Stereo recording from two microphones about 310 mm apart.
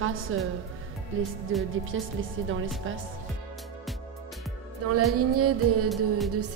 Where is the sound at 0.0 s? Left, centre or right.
Right.